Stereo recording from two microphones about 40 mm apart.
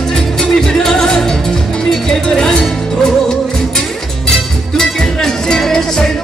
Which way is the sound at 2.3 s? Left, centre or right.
Centre.